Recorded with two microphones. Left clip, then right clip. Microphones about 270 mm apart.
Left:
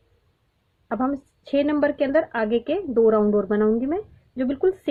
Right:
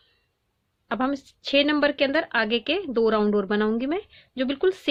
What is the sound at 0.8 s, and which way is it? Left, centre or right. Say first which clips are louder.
Speech: left 1 dB; right.